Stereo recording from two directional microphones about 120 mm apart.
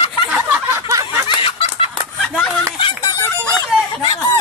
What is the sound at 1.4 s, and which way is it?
Chicken, 50° left (ahead or behind).